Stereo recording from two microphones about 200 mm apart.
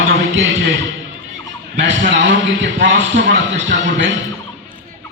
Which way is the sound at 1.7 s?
65° right (ahead or behind).